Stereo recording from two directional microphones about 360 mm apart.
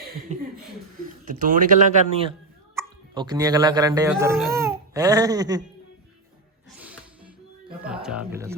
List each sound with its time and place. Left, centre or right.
0.3 s speech: centre
6.7 s music: centre
7.8 s speech: centre